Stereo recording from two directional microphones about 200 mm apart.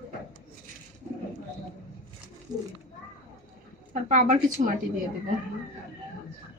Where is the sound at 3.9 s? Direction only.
40° right (ahead or behind).